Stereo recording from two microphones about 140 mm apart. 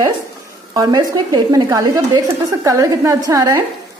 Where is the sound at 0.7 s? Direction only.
30° right (ahead or behind).